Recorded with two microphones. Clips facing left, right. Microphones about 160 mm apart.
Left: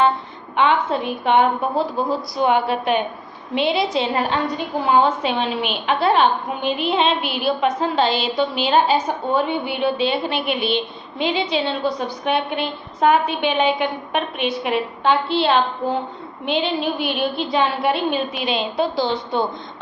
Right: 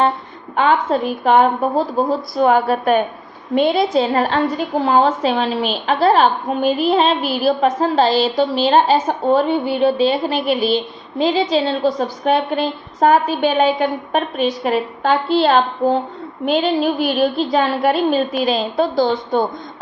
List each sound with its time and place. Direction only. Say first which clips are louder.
0.5 s a woman's voice: right 3 dB; 40° right (ahead or behind)